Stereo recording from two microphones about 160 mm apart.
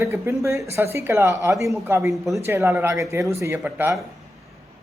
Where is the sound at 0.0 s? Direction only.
15° right (ahead or behind).